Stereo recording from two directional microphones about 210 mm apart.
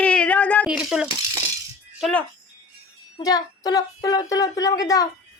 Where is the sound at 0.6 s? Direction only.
5° right (ahead or behind).